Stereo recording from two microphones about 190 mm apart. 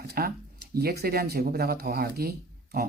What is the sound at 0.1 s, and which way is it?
Speech, 50° right (ahead or behind).